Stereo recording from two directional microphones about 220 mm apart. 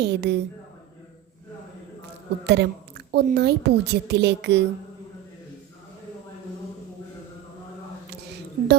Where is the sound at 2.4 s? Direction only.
50° right (ahead or behind).